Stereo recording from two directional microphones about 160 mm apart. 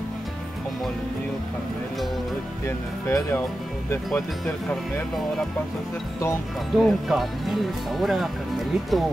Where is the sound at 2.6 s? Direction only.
15° left (ahead or behind).